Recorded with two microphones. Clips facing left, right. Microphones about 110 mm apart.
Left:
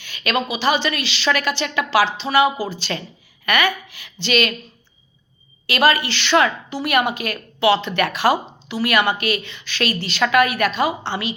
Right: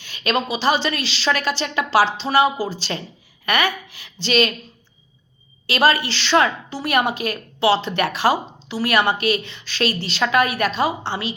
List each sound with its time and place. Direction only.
0.0 s a sound: 40° right (ahead or behind)
0.5 s speech: 40° right (ahead or behind)
5.6 s speech: 40° right (ahead or behind)